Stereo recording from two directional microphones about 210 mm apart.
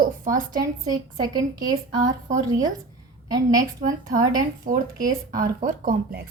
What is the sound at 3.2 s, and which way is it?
Speech, 20° right (ahead or behind).